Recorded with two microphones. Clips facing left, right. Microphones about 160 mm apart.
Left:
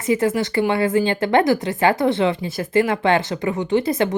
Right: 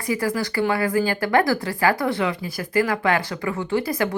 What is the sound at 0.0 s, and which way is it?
Speech, 25° left (ahead or behind).